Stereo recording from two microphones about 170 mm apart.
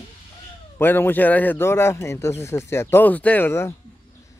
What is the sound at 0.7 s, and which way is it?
A man's voice, 10° left (ahead or behind).